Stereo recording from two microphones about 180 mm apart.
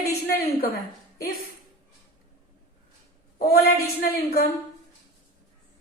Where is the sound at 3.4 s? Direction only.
55° left (ahead or behind).